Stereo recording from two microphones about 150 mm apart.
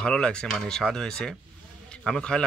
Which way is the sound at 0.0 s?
5° left (ahead or behind).